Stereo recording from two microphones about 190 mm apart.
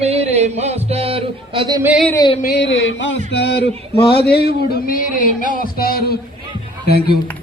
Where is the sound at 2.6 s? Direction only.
70° left (ahead or behind); by 6.2 s 55° left (ahead or behind).